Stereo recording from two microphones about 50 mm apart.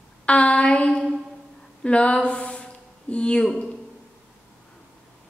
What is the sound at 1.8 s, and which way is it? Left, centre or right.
Speech, left.